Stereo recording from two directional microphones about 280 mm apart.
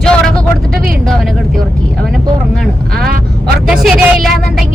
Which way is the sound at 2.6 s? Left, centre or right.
Centre.